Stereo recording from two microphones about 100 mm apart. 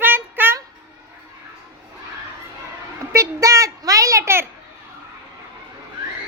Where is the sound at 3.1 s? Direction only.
30° right (ahead or behind).